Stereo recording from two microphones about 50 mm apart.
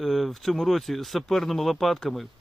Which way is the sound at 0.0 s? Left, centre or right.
Centre.